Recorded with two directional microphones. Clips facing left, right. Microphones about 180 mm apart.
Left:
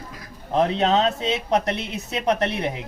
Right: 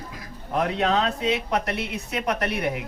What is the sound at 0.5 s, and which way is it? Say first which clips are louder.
Speech: left 3 dB; 25° left (ahead or behind).